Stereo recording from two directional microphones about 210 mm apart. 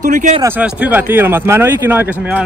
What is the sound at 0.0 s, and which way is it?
Speech, 35° right (ahead or behind).